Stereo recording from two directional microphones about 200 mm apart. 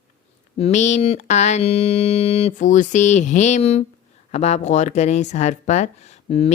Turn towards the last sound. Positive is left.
turn(degrees=30)  # may be behind; listen again after turning